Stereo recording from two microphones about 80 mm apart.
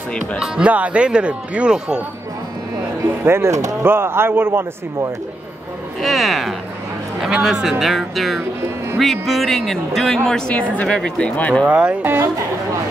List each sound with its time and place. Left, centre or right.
0.4 s speech: centre
3.3 s a man's voice: right
5.9 s speech: centre
11.6 s a man's voice: centre